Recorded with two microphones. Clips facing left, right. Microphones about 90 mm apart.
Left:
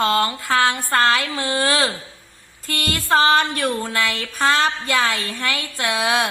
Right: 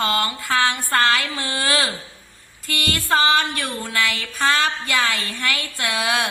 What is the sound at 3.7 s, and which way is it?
A woman's voice, 30° left (ahead or behind).